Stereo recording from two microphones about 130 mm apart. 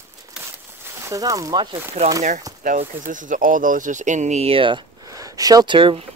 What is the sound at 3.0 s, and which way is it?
Speech, 85° right.